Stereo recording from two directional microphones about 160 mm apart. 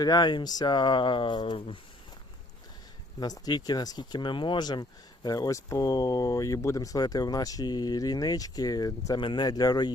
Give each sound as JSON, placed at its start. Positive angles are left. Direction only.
{"t": 0.0, "sound": "speech", "side_deg": 25}
{"t": 3.2, "sound": "speech", "side_deg": 25}